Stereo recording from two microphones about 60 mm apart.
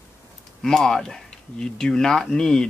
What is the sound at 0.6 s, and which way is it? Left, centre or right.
Speech, centre.